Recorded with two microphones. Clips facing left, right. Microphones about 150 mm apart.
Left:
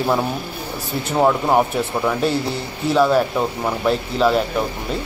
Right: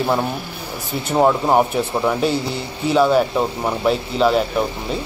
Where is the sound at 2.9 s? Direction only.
5° right (ahead or behind).